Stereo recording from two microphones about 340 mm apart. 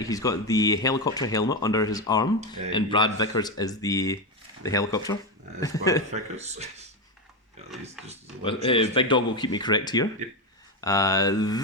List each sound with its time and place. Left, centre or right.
0.0 s speech: centre
6.1 s speech: centre
8.7 s speech: centre